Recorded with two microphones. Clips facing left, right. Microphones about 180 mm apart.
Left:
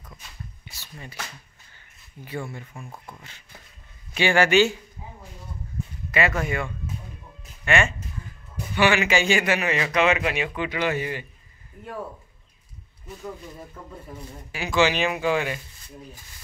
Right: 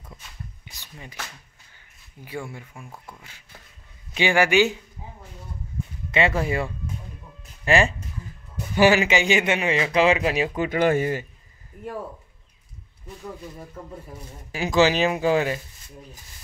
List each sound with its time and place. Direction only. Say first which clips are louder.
0.7 s a sound: left 1 dB; 15° right (ahead or behind)
3.2 s a man's voice: left 1 dB; 10° right (ahead or behind)
6.1 s speech: right 2 dB; 30° right (ahead or behind)
9.0 s speech: right 1 dB; 20° right (ahead or behind); by 11.2 s 45° right (ahead or behind)
14.5 s speech: right 3 dB; 40° right (ahead or behind)